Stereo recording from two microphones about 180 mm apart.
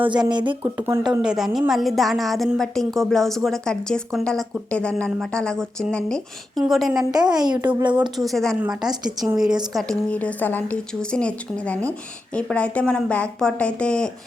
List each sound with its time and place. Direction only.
0.0 s a woman's voice: 25° right (ahead or behind)
0.6 s a woman's voice: 10° right (ahead or behind)
7.0 s a woman's voice: 20° right (ahead or behind)
8.3 s a woman's voice: centre (ahead or behind)
9.7 s a woman's voice: 5° left (ahead or behind)